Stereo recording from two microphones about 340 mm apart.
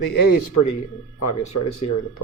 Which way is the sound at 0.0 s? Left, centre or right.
Left.